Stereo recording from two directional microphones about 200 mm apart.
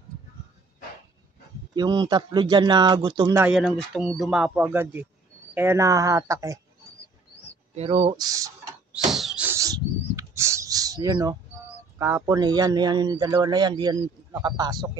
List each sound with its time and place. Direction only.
1.8 s speech: 20° right (ahead or behind)
3.4 s speech: centre (ahead or behind)
7.7 s speech: 30° right (ahead or behind)
8.9 s bird: centre (ahead or behind); by 11.3 s 20° right (ahead or behind)
12.0 s speech: 15° right (ahead or behind)